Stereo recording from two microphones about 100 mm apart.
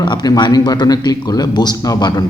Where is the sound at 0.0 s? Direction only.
45° left (ahead or behind).